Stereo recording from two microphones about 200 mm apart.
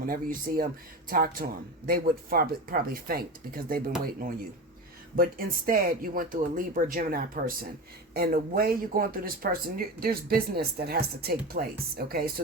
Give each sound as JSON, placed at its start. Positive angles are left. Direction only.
{"t": 0.0, "sound": "speech", "side_deg": -45}
{"t": 5.1, "sound": "speech", "side_deg": -45}